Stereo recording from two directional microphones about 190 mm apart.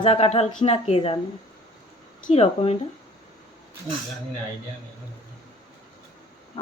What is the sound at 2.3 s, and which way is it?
Speech, 30° left (ahead or behind).